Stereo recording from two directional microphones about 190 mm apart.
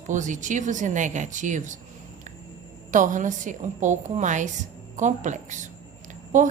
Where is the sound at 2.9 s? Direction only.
45° right (ahead or behind).